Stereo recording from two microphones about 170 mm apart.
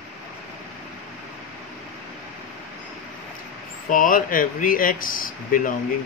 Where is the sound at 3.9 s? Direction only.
55° left (ahead or behind).